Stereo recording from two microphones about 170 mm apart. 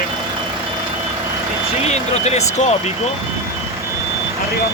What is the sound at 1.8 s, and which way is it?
Speech, 40° left (ahead or behind).